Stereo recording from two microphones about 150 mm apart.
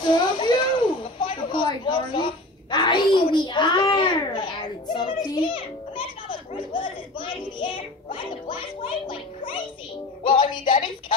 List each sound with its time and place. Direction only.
0.0 s a sound: 30° left (ahead or behind)
6.5 s music: 35° left (ahead or behind)
10.2 s music: 30° left (ahead or behind)